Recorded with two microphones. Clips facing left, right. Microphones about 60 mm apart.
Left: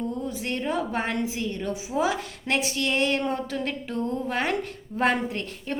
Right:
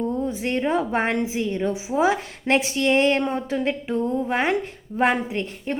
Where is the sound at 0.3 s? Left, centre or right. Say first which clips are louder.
Right 5 dB; right.